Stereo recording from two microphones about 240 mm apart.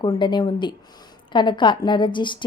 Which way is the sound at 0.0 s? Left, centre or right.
Centre.